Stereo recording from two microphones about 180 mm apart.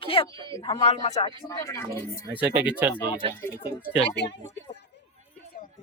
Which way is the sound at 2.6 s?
10° right (ahead or behind).